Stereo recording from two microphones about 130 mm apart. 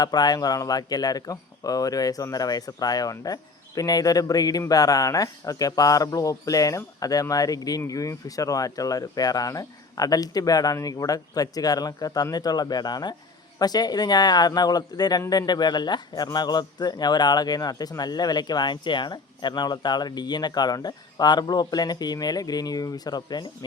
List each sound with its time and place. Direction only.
0.0 s a man's voice: 30° left (ahead or behind)